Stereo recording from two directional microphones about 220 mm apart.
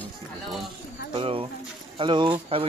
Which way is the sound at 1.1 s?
25° right (ahead or behind).